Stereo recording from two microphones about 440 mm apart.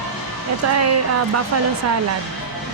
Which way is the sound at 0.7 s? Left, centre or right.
Right.